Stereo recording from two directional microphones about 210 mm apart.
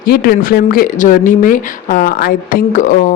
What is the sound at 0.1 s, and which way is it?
Speech, 45° left (ahead or behind).